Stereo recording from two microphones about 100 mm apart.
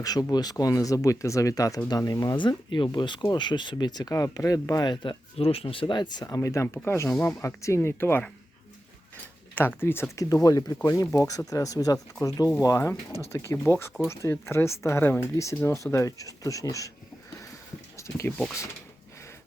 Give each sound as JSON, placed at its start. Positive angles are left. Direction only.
{"t": 0.0, "sound": "speech", "side_deg": 40}
{"t": 5.4, "sound": "speech", "side_deg": 75}
{"t": 6.2, "sound": "speech", "side_deg": 35}
{"t": 7.4, "sound": "speech", "side_deg": 30}
{"t": 9.6, "sound": "speech", "side_deg": 20}
{"t": 10.2, "sound": "speech", "side_deg": 35}
{"t": 17.9, "sound": "a sound", "side_deg": 30}